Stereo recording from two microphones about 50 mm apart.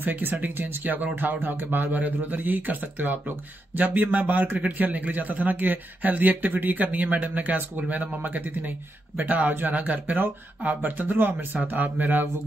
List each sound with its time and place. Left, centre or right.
0.0 s speech: right